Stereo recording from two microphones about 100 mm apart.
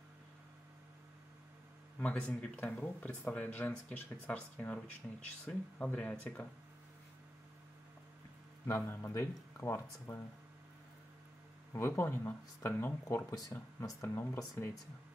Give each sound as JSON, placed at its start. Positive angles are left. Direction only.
{"t": 2.0, "sound": "speech", "side_deg": 15}
{"t": 8.6, "sound": "speech", "side_deg": 25}
{"t": 11.7, "sound": "speech", "side_deg": 25}
{"t": 13.0, "sound": "speech", "side_deg": 35}
{"t": 14.0, "sound": "speech", "side_deg": 20}